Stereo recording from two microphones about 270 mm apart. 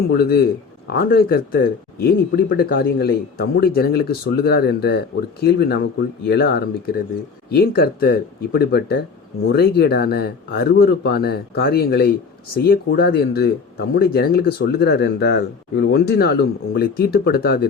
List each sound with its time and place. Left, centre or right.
0.1 s speech: left